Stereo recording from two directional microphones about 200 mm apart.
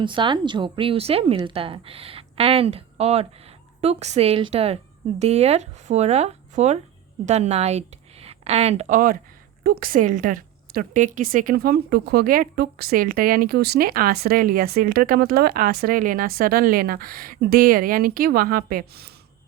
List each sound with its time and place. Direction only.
0.0 s a woman's voice: 25° right (ahead or behind); by 19.1 s 50° right (ahead or behind)